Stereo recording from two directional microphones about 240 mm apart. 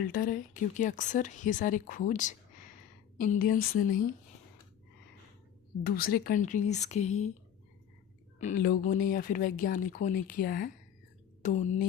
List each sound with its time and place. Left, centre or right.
0.1 s speech: left
5.8 s speech: left
8.4 s speech: left
11.4 s a sound: left